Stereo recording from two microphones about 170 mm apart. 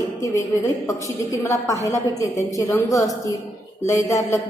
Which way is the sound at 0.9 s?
20° left (ahead or behind).